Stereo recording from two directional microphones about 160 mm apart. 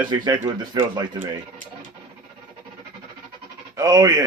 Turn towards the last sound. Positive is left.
turn(degrees=-25)  # may be behind; listen again after turning